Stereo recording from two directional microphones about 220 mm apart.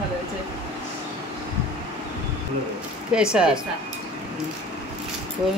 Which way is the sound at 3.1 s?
5° right (ahead or behind).